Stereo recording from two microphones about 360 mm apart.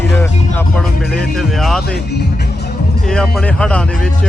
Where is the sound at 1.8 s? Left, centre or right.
Left.